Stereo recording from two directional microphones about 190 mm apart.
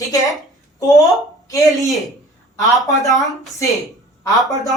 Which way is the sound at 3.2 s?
15° left (ahead or behind).